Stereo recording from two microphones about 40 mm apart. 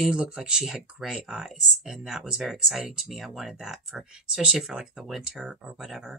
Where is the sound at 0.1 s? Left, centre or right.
Right.